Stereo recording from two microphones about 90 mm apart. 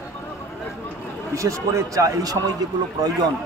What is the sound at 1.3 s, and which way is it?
A man's voice, 35° right (ahead or behind).